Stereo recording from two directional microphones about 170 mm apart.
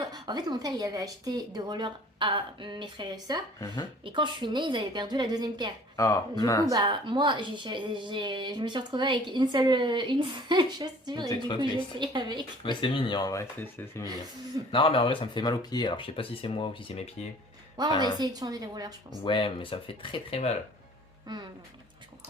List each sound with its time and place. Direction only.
0.0 s a woman's voice: 25° right (ahead or behind)
6.0 s speech: 20° left (ahead or behind)
6.7 s a woman's voice: 25° right (ahead or behind)
12.6 s speech: 30° left (ahead or behind)
14.7 s speech: 30° left (ahead or behind)
17.9 s speech: 25° left (ahead or behind)
18.2 s a woman's voice: 25° right (ahead or behind)
19.2 s speech: 30° left (ahead or behind)